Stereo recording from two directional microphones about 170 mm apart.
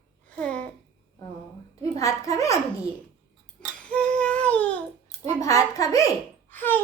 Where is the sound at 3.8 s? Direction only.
5° left (ahead or behind).